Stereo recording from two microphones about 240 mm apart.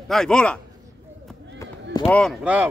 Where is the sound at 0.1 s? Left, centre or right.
Centre.